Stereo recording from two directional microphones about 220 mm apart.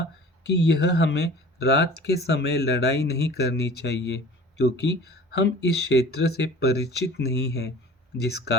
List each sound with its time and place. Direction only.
0.5 s speech: 50° left (ahead or behind)